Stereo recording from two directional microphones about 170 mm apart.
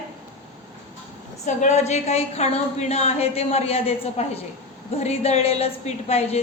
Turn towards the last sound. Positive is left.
turn(degrees=40)  # may be behind; listen again after turning